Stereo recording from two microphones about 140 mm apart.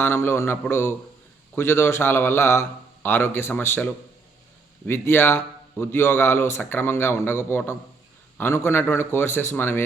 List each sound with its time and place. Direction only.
0.0 s a man's voice: 15° left (ahead or behind)